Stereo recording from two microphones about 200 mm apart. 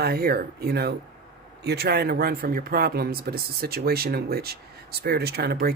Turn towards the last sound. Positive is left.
turn(degrees=-50)  # may be behind; listen again after turning